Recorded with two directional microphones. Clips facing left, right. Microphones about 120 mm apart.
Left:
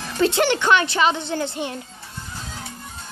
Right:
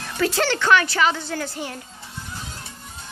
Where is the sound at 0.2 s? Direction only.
20° left (ahead or behind).